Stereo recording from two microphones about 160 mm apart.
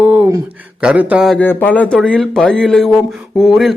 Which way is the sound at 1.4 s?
10° left (ahead or behind).